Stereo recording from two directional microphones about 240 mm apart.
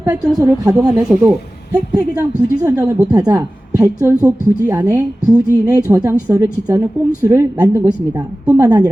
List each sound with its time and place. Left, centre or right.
0.0 s a woman's voice: centre
2.6 s a woman's voice: centre